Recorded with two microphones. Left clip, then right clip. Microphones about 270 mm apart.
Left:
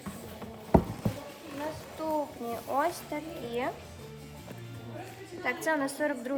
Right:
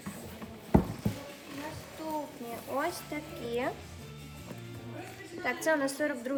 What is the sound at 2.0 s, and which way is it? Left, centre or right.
Speech, centre.